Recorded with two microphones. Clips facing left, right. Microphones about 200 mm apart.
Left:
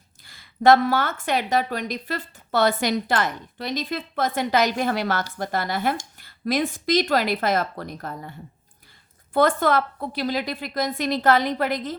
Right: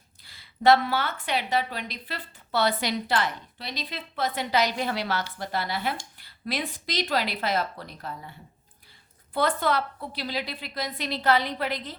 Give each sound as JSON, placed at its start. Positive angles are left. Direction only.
{"t": 0.2, "sound": "a woman's voice", "side_deg": 50}